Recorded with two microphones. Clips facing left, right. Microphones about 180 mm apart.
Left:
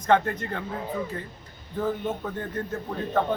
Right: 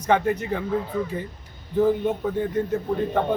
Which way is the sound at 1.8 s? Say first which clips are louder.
Right 7 dB; 15° right (ahead or behind).